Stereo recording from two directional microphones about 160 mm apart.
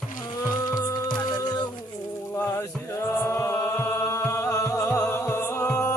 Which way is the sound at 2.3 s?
15° left (ahead or behind).